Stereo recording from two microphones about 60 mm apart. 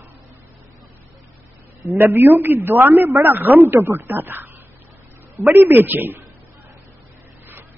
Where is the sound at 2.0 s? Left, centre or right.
Right.